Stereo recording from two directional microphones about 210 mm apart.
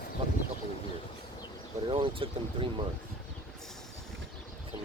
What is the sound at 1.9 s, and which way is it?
Speech, 25° right (ahead or behind).